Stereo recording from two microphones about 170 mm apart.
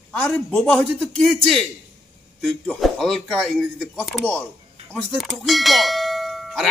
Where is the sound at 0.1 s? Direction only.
5° left (ahead or behind).